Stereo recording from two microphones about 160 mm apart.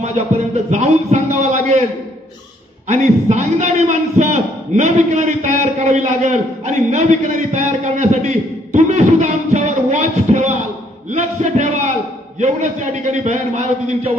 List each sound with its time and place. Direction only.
0.5 s a man's voice: 45° right (ahead or behind)
2.8 s a man's voice: 45° right (ahead or behind)